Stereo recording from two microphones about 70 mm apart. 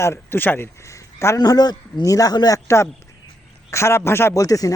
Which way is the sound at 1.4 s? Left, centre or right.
Left.